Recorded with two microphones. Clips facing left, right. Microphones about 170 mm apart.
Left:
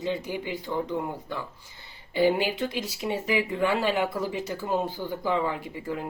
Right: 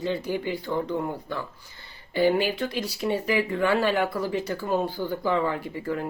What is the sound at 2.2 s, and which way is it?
Speech, 15° left (ahead or behind).